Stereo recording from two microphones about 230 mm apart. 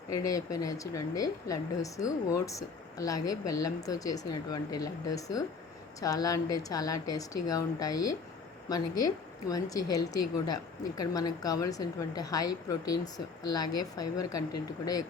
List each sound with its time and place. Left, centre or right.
0.2 s speech: centre